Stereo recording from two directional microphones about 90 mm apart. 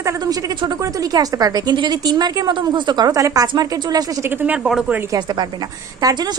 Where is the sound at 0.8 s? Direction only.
40° right (ahead or behind).